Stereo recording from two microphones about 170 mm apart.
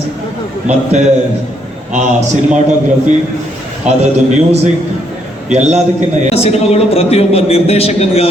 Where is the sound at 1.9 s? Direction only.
40° right (ahead or behind).